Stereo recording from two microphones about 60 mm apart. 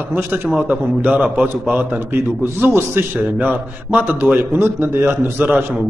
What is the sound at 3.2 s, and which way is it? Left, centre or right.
A man's voice, right.